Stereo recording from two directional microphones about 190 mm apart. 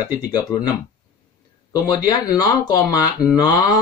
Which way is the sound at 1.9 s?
20° left (ahead or behind).